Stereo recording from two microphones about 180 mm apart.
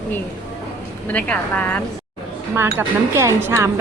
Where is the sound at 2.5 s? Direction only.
15° right (ahead or behind).